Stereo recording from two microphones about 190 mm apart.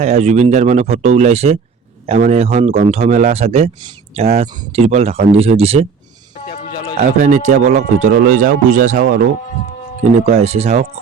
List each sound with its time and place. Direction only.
0.0 s speech: 35° right (ahead or behind)
6.5 s music: 20° left (ahead or behind)
7.2 s speech: 40° right (ahead or behind)
8.1 s speech: 50° right (ahead or behind)
10.0 s speech: 35° right (ahead or behind)